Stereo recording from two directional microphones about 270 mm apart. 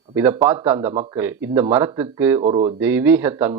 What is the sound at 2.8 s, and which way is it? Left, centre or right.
Speech, centre.